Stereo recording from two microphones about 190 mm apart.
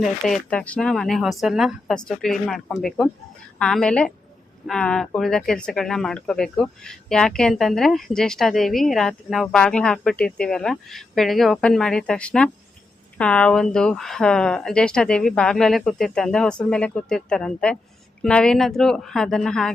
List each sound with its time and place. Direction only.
0.0 s speech: 5° left (ahead or behind)